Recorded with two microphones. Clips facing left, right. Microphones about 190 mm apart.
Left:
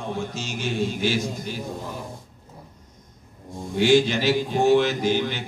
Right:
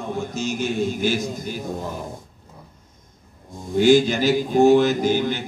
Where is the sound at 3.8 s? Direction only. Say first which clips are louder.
Right 3 dB; 45° right (ahead or behind).